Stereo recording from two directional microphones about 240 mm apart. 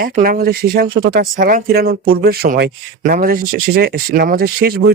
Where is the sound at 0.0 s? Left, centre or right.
Right.